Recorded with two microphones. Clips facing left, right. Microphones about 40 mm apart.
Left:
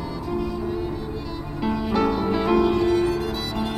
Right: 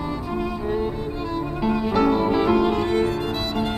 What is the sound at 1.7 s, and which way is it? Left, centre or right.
Music, centre.